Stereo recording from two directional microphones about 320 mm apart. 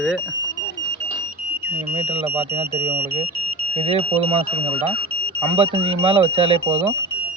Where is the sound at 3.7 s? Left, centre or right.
Centre.